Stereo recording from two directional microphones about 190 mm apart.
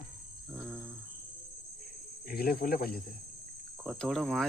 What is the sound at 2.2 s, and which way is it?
Speech, 55° left (ahead or behind).